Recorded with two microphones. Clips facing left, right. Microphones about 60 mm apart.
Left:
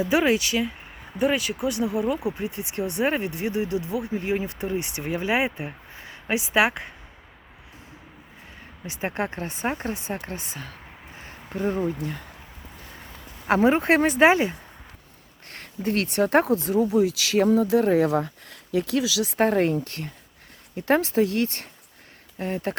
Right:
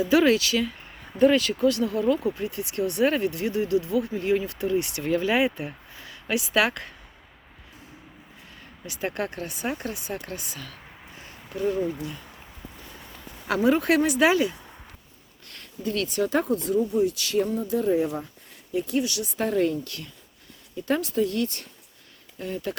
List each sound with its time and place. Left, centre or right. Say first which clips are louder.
0.0 s speech: right 1 dB; left
8.9 s speech: left 1 dB; left
11.2 s a sound: even; left
12.0 s speech: left 3 dB; left
13.5 s speech: left 2 dB; left
15.4 s a sound: left 4 dB; left
15.8 s speech: left 3 dB; left
19.4 s speech: left 3 dB; left
20.7 s speech: left 4 dB; left